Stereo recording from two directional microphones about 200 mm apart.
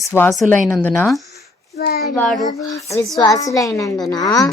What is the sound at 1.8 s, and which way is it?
Speech, 50° left (ahead or behind).